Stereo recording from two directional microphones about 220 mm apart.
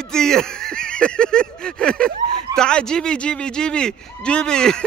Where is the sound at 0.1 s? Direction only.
5° left (ahead or behind).